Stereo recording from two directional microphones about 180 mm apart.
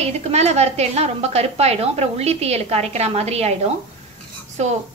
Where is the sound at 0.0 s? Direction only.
35° right (ahead or behind).